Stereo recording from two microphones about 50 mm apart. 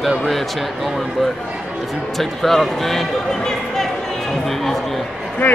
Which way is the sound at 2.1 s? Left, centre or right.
Centre.